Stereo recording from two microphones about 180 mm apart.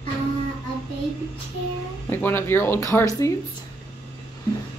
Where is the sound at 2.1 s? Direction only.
10° left (ahead or behind).